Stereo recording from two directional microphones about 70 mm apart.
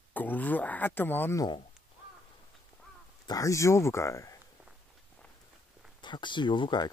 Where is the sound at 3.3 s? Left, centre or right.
Left.